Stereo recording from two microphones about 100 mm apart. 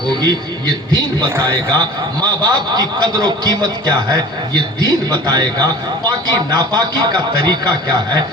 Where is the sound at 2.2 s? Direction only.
40° right (ahead or behind).